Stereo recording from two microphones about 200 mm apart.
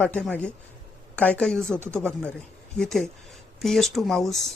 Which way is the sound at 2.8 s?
5° left (ahead or behind).